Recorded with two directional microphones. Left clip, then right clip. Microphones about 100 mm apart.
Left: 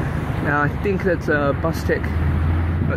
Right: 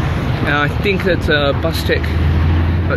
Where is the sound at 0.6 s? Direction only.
35° left (ahead or behind).